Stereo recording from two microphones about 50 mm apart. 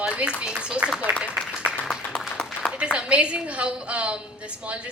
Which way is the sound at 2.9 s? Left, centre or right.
Right.